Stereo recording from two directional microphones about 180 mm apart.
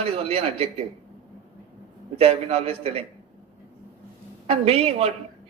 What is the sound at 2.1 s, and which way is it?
Speech, 35° right (ahead or behind).